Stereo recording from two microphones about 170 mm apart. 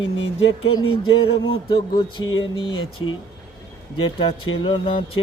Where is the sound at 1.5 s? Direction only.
30° left (ahead or behind).